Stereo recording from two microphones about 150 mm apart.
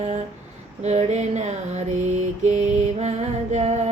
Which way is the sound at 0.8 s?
50° right (ahead or behind).